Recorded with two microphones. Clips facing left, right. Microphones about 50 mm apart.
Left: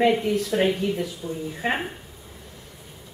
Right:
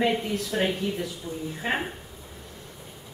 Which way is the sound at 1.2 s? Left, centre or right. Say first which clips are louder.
Left 3 dB; centre.